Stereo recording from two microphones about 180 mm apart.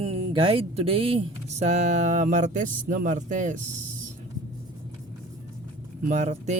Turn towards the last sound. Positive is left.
turn(degrees=-40)  # may be behind; listen again after turning